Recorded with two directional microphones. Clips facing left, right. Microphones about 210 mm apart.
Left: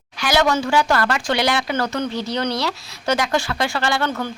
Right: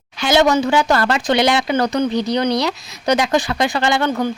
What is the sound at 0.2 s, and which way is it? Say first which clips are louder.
Speech: right 4 dB; 25° right (ahead or behind).